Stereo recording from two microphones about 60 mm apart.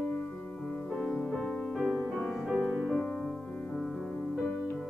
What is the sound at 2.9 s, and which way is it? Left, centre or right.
Music, centre.